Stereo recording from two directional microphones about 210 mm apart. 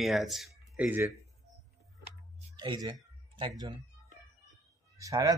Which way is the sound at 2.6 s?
20° right (ahead or behind).